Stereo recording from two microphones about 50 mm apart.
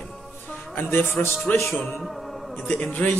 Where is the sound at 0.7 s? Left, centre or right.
Left.